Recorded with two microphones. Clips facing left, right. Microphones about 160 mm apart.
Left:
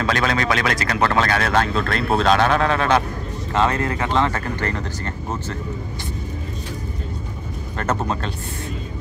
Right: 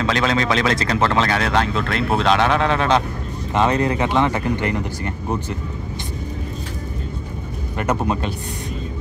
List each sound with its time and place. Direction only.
0.0 s speech: 20° right (ahead or behind)
7.7 s speech: 10° right (ahead or behind)